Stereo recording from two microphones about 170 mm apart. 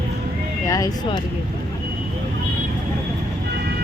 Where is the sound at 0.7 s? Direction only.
20° left (ahead or behind).